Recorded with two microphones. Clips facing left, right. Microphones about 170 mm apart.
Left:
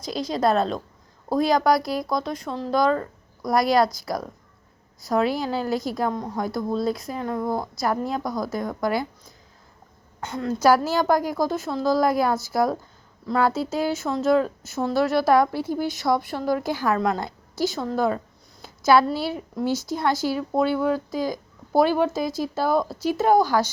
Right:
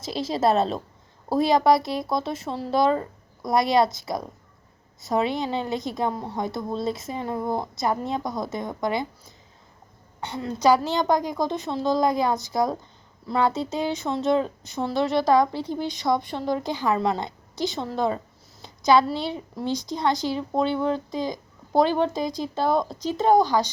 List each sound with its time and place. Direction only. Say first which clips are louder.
0.0 s a woman's voice: even; 5° right (ahead or behind)
2.9 s a sound: left 1 dB; 15° right (ahead or behind)
3.5 s a woman's voice: left 1 dB; centre (ahead or behind)
5.0 s a woman's voice: left 2 dB; centre (ahead or behind)
6.2 s speech: left 1 dB; 25° right (ahead or behind)
6.5 s a woman's voice: left 3 dB; centre (ahead or behind)
7.3 s speech: left 1 dB; 25° right (ahead or behind)
7.8 s a woman's voice: left 1 dB; centre (ahead or behind)
8.2 s speech: left 2 dB; 20° right (ahead or behind)
10.3 s a woman's voice: left 1 dB; centre (ahead or behind)
23.4 s speech: even; 20° right (ahead or behind)